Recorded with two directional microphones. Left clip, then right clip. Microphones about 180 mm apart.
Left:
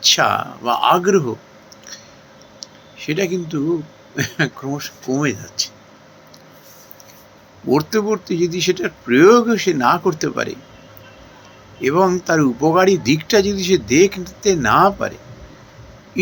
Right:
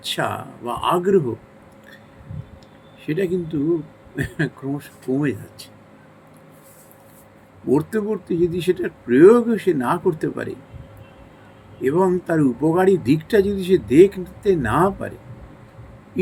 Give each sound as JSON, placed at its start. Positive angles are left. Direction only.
{"t": 0.1, "sound": "speech", "side_deg": -15}
{"t": 3.0, "sound": "speech", "side_deg": -15}
{"t": 7.9, "sound": "speech", "side_deg": -15}
{"t": 11.8, "sound": "speech", "side_deg": -15}